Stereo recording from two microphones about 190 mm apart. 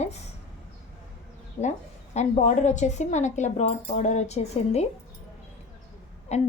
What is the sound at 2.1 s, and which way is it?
A woman's voice, 40° left (ahead or behind).